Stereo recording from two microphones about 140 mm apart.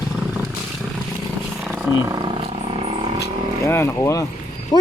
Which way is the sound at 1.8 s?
20° right (ahead or behind).